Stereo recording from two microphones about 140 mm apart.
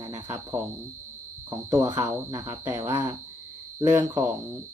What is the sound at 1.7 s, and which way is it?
Speech, 20° right (ahead or behind).